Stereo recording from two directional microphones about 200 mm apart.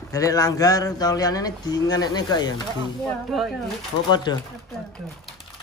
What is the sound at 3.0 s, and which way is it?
Speech, centre (ahead or behind).